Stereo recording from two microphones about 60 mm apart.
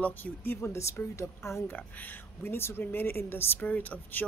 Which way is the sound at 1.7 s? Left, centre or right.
Left.